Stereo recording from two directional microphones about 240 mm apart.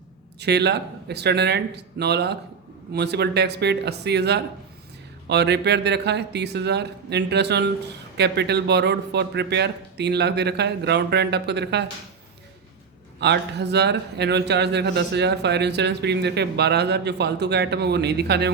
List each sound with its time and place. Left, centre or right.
0.3 s a man's voice: right
13.1 s a man's voice: right